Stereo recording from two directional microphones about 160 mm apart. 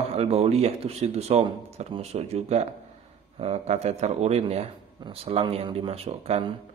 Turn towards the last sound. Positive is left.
turn(degrees=-40)  # may be behind; listen again after turning